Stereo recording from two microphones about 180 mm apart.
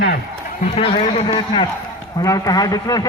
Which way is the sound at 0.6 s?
35° left (ahead or behind).